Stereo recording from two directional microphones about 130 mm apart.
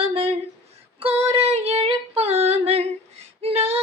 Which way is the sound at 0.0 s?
45° right (ahead or behind).